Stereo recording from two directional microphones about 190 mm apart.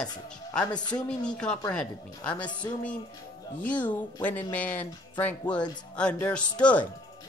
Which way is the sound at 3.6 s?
10° left (ahead or behind).